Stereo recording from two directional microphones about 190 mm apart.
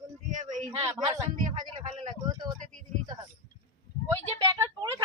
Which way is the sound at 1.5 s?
25° right (ahead or behind).